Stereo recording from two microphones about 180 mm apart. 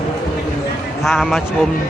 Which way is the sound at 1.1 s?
Centre (ahead or behind).